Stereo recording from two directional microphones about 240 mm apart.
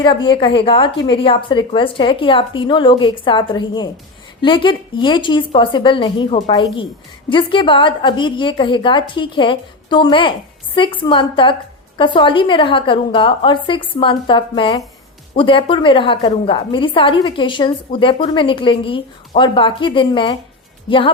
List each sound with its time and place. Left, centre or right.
0.0 s a woman's voice: centre